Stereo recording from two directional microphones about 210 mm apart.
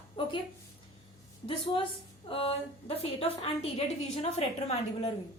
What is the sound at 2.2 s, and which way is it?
A woman's voice, 25° left (ahead or behind).